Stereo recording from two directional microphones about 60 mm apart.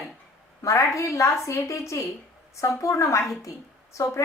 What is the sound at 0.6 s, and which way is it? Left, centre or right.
A woman's voice, left.